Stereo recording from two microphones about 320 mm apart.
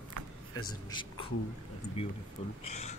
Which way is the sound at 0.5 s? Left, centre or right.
Centre.